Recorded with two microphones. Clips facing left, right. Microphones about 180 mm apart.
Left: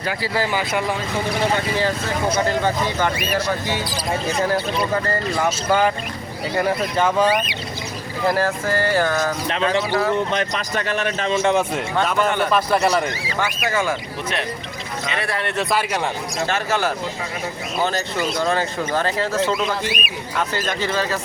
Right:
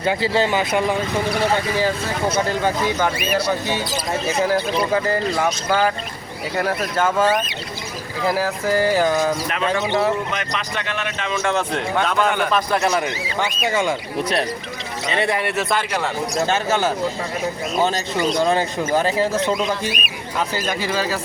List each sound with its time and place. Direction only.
0.0 s speech: 25° right (ahead or behind)
2.3 s speech: 10° right (ahead or behind)
5.5 s speech: centre (ahead or behind)
10.3 s speech: 40° left (ahead or behind)
11.4 s speech: 15° left (ahead or behind)
13.4 s speech: 20° right (ahead or behind)
15.0 s speech: 30° right (ahead or behind)
15.3 s speech: 10° right (ahead or behind)
16.5 s speech: 20° right (ahead or behind)